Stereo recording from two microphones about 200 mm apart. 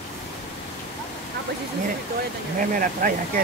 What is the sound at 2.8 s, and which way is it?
Speech, 45° right (ahead or behind).